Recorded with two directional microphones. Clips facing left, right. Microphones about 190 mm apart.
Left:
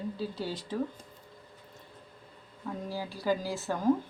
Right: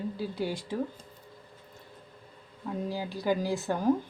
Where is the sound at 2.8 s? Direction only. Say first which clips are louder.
Right 1 dB; 15° right (ahead or behind).